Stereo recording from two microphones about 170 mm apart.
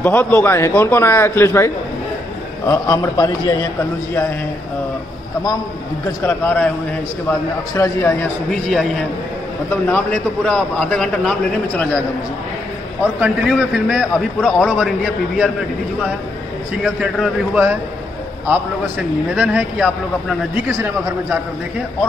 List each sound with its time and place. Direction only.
0.0 s a man's voice: 10° left (ahead or behind)
6.2 s a man's voice: 10° left (ahead or behind)
13.2 s a man's voice: 10° right (ahead or behind)
16.8 s a man's voice: 5° right (ahead or behind)
19.3 s a man's voice: 5° right (ahead or behind)